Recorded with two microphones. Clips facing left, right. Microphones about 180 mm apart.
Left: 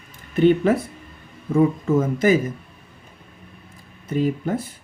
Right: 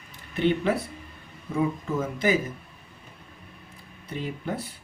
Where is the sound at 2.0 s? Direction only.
45° left (ahead or behind).